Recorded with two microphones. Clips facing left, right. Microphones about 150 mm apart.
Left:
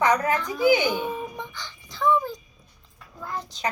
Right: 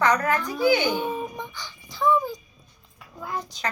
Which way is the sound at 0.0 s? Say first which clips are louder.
Even; 20° left (ahead or behind).